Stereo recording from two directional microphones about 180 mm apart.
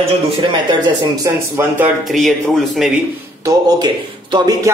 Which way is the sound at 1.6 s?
15° right (ahead or behind).